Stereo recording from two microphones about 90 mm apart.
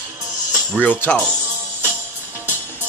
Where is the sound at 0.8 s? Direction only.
15° left (ahead or behind).